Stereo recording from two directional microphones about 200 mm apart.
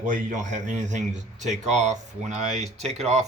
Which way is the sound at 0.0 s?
40° right (ahead or behind).